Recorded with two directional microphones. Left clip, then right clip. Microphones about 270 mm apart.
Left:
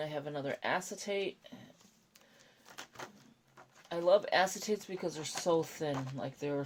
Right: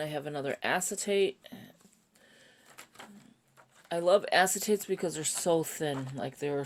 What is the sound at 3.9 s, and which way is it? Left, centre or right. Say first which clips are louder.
Speech: right 3 dB; right.